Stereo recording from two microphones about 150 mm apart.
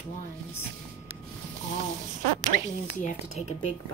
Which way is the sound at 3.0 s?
50° left (ahead or behind).